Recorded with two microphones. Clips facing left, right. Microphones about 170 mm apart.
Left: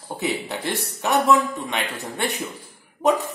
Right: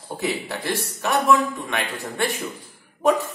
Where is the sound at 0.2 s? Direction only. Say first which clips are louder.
Left 1 dB; 20° left (ahead or behind).